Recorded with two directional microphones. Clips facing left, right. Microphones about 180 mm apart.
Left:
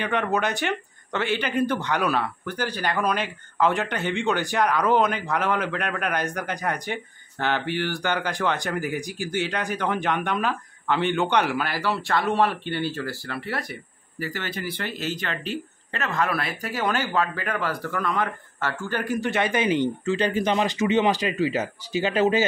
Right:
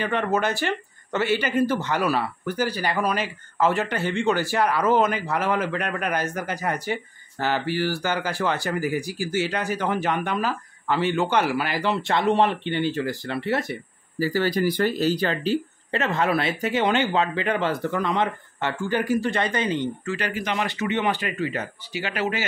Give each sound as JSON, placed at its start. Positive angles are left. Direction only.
{"t": 0.0, "sound": "speech", "side_deg": 0}
{"t": 14.2, "sound": "speech", "side_deg": -35}
{"t": 20.2, "sound": "speech", "side_deg": 25}